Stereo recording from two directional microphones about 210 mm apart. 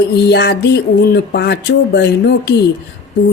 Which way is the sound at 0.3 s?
50° left (ahead or behind).